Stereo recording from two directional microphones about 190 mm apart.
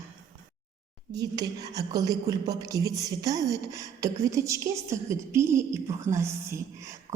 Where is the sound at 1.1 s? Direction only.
20° right (ahead or behind).